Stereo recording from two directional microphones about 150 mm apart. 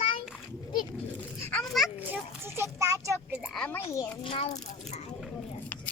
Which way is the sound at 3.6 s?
10° left (ahead or behind).